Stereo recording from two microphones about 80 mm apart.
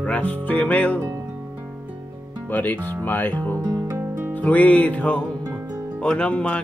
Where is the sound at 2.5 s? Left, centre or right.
Left.